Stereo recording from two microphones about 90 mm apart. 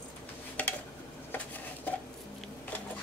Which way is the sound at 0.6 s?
15° left (ahead or behind).